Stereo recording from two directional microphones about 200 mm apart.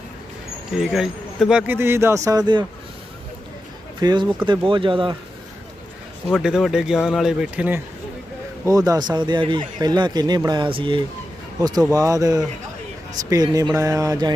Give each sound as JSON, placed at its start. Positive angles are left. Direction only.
{"t": 0.7, "sound": "speech", "side_deg": 0}
{"t": 4.0, "sound": "speech", "side_deg": -20}
{"t": 6.2, "sound": "speech", "side_deg": 0}
{"t": 8.6, "sound": "speech", "side_deg": -15}